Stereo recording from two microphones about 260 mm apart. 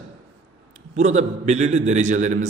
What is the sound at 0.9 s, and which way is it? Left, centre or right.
Speech, right.